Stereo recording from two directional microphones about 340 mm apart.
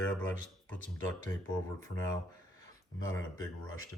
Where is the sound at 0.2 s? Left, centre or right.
Centre.